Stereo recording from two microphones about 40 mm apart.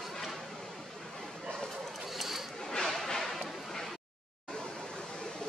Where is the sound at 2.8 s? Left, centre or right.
Centre.